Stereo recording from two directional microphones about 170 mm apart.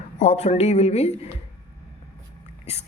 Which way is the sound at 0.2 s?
40° left (ahead or behind).